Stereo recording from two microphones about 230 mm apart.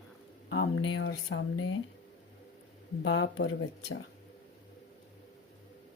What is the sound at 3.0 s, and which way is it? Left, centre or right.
Speech, left.